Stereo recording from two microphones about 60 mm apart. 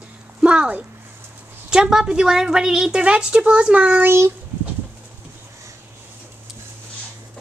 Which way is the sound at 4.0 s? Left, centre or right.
Right.